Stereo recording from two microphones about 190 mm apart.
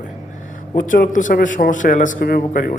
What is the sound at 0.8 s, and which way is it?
A man's voice, 45° left (ahead or behind).